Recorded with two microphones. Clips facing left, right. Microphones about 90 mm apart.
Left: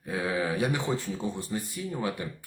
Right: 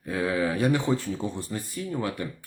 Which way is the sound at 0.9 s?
15° left (ahead or behind).